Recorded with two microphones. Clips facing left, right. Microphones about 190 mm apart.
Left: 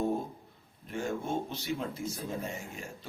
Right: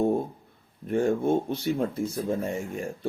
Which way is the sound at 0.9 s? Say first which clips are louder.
Right 11 dB; 55° right (ahead or behind).